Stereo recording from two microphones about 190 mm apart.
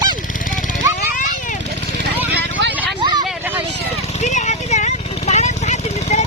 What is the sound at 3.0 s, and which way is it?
Vehicle, 25° right (ahead or behind).